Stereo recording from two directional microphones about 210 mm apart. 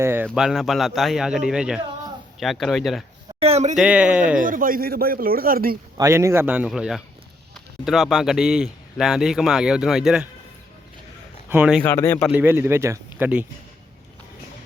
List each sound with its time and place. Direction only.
0.0 s a man's voice: 10° right (ahead or behind)
3.4 s speech: 30° right (ahead or behind)
3.8 s a man's voice: 5° right (ahead or behind)
4.4 s speech: 40° right (ahead or behind)
6.0 s a man's voice: 15° right (ahead or behind)
11.4 s speech: 5° right (ahead or behind)
11.8 s speech: 10° left (ahead or behind)
12.3 s speech: 10° right (ahead or behind)